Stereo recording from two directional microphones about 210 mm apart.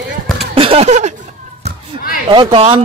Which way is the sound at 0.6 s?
30° right (ahead or behind).